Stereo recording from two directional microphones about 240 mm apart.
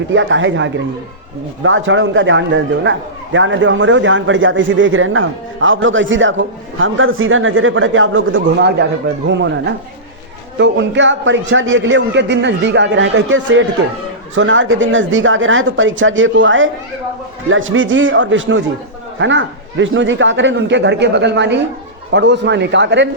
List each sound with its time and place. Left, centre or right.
0.1 s a man's voice: right